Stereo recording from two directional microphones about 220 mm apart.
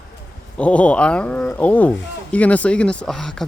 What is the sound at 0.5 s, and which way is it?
Speech, 5° left (ahead or behind).